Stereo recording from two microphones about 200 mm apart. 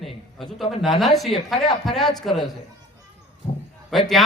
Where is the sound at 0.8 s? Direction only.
Centre (ahead or behind).